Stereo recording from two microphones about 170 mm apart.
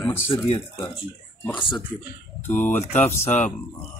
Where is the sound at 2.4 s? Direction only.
10° left (ahead or behind).